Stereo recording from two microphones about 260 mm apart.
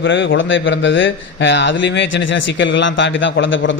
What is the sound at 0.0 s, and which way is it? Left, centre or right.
A man's voice, left.